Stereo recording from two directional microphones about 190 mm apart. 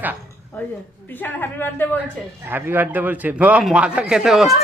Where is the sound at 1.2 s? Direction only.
10° left (ahead or behind).